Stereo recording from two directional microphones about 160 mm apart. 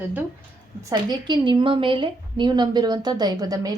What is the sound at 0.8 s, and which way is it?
A woman's voice, 25° right (ahead or behind).